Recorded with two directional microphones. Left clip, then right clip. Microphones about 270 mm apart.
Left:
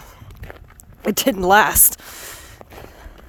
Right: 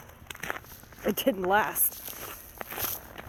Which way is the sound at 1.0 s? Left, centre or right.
Left.